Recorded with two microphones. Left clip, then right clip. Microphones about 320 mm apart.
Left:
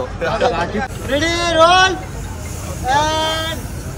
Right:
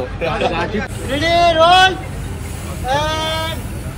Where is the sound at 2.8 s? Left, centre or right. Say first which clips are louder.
Left 2 dB; left.